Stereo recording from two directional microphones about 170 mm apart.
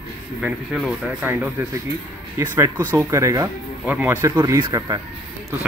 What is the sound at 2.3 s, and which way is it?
Speech, 15° right (ahead or behind).